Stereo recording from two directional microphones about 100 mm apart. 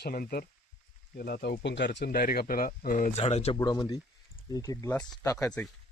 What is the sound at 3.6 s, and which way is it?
Speech, 35° left (ahead or behind).